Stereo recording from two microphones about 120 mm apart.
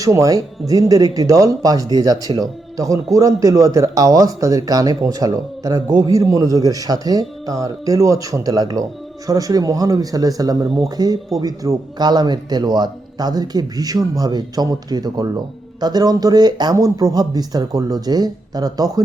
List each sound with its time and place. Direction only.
0.0 s speech: 25° right (ahead or behind)